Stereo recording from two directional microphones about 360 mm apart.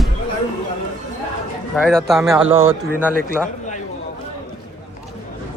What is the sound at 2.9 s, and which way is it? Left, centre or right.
Speech, centre.